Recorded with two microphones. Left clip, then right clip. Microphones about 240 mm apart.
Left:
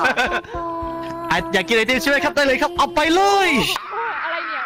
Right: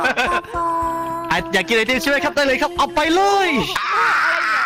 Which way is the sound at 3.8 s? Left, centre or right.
Right.